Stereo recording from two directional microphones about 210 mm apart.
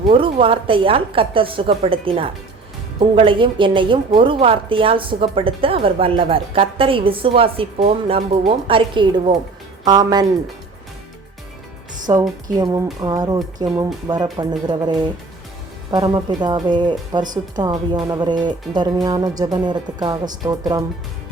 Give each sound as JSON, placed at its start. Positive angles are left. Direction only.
{"t": 0.1, "sound": "a woman's voice", "side_deg": -25}
{"t": 12.1, "sound": "a woman's voice", "side_deg": -15}